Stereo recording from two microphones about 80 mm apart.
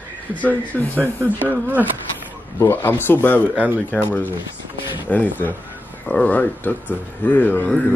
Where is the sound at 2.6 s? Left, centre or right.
Left.